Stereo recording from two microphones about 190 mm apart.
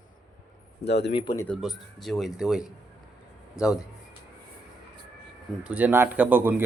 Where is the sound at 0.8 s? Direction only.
65° left (ahead or behind).